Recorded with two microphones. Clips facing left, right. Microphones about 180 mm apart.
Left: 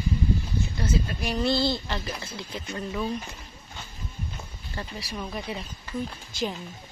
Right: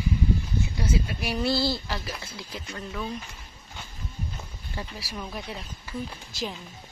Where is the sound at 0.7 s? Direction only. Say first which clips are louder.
Left 2 dB; 10° right (ahead or behind).